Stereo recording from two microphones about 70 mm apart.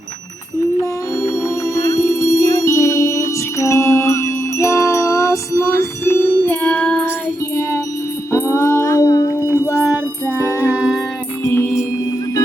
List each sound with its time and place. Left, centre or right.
0.8 s music: left
6.7 s music: centre
8.3 s music: left
9.0 s music: left
9.4 s music: right
11.4 s music: left